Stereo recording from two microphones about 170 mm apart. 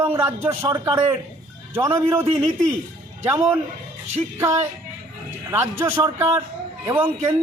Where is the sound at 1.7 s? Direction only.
15° right (ahead or behind).